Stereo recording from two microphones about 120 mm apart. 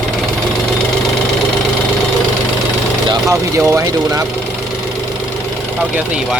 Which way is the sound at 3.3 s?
25° right (ahead or behind).